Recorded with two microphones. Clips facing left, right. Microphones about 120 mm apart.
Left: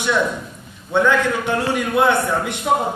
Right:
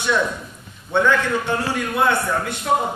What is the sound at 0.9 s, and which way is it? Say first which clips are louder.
A man's voice: left 1 dB; 15° left (ahead or behind).